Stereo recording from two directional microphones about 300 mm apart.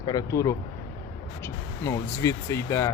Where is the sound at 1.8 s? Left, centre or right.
Centre.